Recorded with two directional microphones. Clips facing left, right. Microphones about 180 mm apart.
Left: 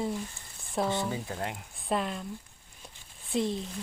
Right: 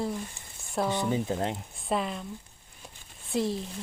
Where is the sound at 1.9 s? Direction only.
Centre (ahead or behind).